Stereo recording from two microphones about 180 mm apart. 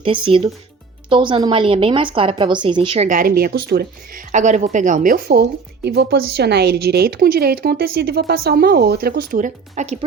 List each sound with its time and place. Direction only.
0.0 s a woman's voice: 30° right (ahead or behind); by 10.0 s 45° right (ahead or behind)